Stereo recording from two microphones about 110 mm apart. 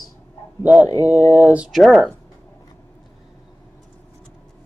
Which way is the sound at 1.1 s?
90° right.